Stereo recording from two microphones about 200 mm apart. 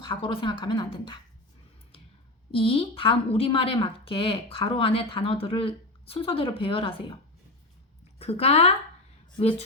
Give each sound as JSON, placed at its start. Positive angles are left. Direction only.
{"t": 0.0, "sound": "a woman's voice", "side_deg": 25}
{"t": 2.5, "sound": "a woman's voice", "side_deg": 25}
{"t": 8.2, "sound": "speech", "side_deg": 30}